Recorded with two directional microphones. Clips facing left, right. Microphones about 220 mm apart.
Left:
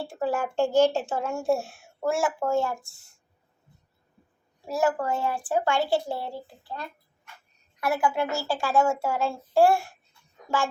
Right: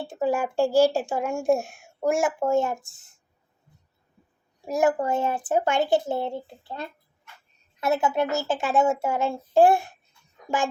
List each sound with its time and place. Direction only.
0.1 s a woman's voice: 15° right (ahead or behind)
4.6 s speech: 15° right (ahead or behind)